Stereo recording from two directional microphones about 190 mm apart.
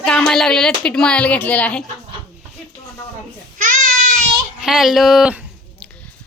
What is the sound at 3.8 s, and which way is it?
Child singing, 45° right (ahead or behind).